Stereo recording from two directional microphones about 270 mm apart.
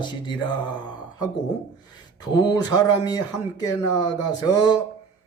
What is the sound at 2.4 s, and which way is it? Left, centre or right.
Speech, centre.